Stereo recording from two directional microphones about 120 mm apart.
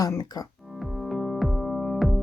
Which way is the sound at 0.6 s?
Centre (ahead or behind).